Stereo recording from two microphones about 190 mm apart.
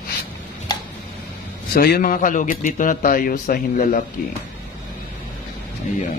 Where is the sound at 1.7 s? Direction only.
55° left (ahead or behind).